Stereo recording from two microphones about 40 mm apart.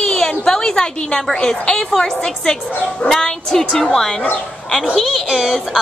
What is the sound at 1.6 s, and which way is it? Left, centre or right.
A woman's voice, centre.